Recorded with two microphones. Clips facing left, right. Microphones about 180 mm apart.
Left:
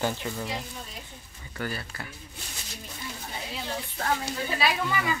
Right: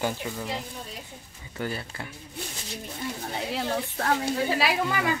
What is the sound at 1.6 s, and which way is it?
Speech, 20° right (ahead or behind).